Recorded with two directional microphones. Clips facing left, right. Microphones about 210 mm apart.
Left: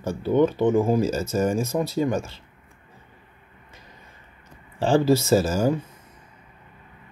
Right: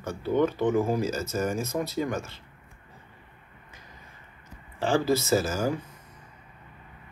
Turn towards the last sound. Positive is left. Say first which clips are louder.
# left 5 dB
turn(degrees=30)  # may be behind; listen again after turning